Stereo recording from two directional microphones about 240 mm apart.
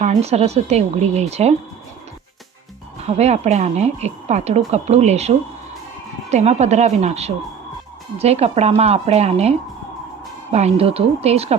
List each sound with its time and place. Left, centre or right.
0.0 s speech: right
3.0 s speech: right
6.3 s speech: right